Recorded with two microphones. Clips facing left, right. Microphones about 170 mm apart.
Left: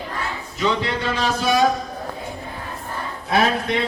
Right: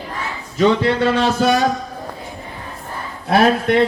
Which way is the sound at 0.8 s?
60° right (ahead or behind).